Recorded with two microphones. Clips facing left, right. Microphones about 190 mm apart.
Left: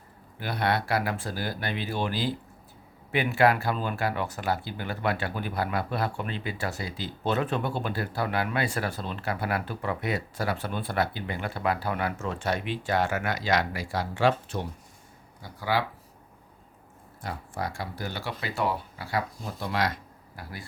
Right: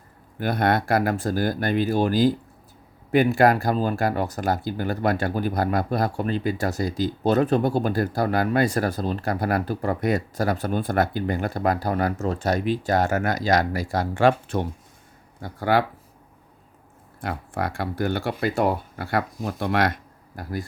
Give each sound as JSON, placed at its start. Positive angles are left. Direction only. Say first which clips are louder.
{"t": 0.3, "sound": "speech", "louder": "right 6 dB", "side_deg": -50}
{"t": 17.2, "sound": "speech", "louder": "right 6 dB", "side_deg": -60}